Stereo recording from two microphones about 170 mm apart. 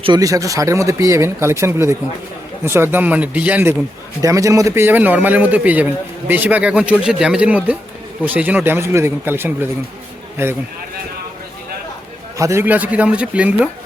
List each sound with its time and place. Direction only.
0.0 s a man's voice: 25° right (ahead or behind)
12.4 s a man's voice: 15° right (ahead or behind)